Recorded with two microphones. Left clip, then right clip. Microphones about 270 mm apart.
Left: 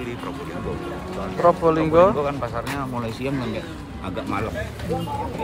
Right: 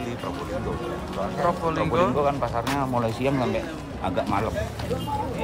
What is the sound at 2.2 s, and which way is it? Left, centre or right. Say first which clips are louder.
Speech: right 1 dB; right.